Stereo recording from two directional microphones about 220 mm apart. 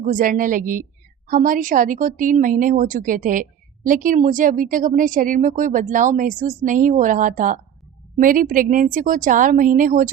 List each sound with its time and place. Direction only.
0.0 s speech: 35° right (ahead or behind)